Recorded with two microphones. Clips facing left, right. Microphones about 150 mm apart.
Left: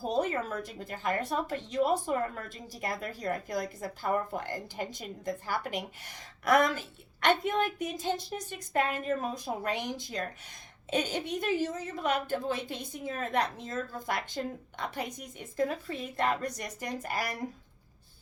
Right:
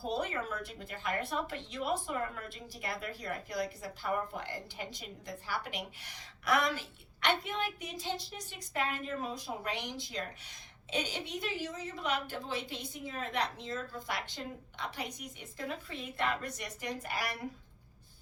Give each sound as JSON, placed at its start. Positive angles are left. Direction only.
{"t": 0.0, "sound": "speech", "side_deg": 45}